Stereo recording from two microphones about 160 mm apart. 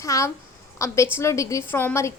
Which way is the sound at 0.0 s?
20° left (ahead or behind).